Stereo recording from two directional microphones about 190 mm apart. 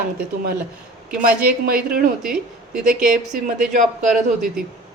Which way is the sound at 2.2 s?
5° right (ahead or behind).